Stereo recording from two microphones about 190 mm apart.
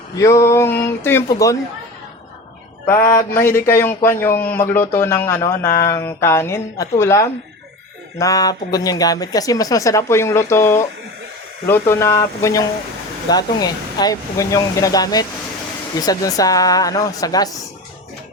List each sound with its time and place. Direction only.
0.2 s speech: 15° left (ahead or behind)
3.3 s speech: 15° left (ahead or behind)